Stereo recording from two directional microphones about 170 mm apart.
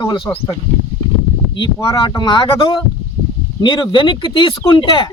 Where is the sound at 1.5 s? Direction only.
30° left (ahead or behind).